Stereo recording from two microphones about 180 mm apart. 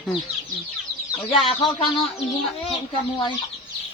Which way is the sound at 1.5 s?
30° left (ahead or behind).